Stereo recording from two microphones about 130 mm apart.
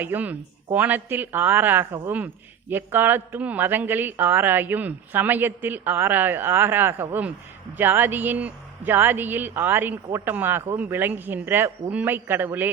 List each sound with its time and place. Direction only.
0.0 s speech: 15° right (ahead or behind)